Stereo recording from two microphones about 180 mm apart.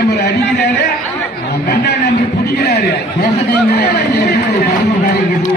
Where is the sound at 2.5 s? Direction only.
65° left (ahead or behind).